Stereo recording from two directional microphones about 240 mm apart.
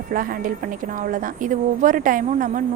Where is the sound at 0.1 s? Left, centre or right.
Right.